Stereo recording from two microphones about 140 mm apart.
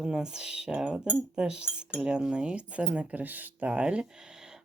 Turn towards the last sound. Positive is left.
turn(degrees=-5)  # may be behind; listen again after turning